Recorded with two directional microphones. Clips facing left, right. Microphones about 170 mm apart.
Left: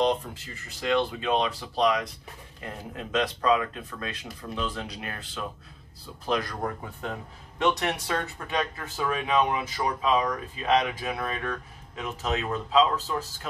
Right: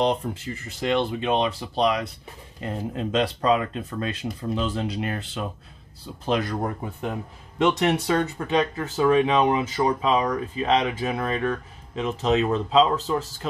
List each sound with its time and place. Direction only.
0.0 s speech: 25° right (ahead or behind)